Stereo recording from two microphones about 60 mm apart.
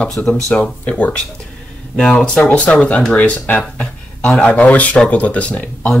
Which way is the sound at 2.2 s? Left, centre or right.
Centre.